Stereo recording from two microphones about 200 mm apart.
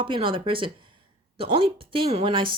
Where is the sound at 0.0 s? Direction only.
25° right (ahead or behind).